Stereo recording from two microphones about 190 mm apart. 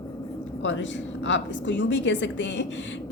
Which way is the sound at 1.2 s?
75° left (ahead or behind).